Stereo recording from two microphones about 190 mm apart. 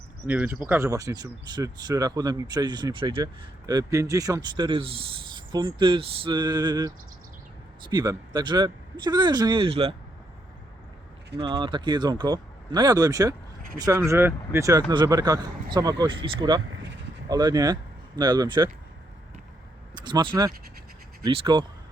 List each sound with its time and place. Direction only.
0.3 s speech: 10° right (ahead or behind); by 9.9 s 30° right (ahead or behind)
11.3 s speech: 25° right (ahead or behind)
20.0 s speech: 25° right (ahead or behind)